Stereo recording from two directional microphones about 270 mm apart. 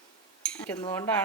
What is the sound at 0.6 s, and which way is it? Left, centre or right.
Speech, centre.